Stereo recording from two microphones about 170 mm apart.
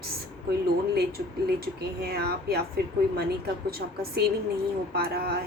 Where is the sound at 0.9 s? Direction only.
65° right (ahead or behind).